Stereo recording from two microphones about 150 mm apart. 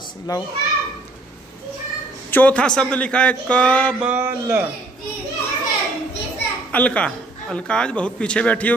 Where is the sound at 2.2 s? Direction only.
10° left (ahead or behind).